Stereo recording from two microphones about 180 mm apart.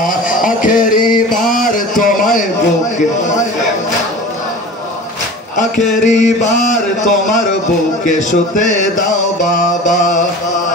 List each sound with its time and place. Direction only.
0.0 s a sound: 50° left (ahead or behind)
3.0 s a man's voice: 40° left (ahead or behind)
6.0 s mantra: 40° left (ahead or behind)